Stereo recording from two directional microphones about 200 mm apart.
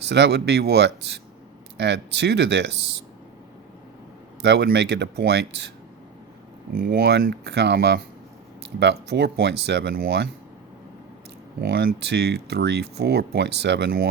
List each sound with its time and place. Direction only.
0.1 s speech: 55° right (ahead or behind)
4.4 s speech: 60° right (ahead or behind)
6.7 s speech: 55° right (ahead or behind)
11.6 s speech: 55° right (ahead or behind)